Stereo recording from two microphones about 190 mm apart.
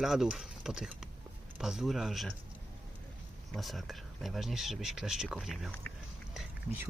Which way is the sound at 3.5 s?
Centre (ahead or behind).